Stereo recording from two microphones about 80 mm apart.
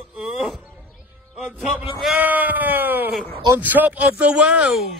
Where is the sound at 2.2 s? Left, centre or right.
Right.